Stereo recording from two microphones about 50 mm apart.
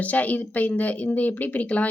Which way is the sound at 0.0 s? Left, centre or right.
Left.